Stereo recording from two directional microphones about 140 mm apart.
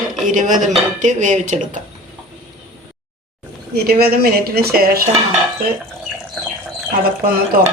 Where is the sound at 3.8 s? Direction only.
90° right.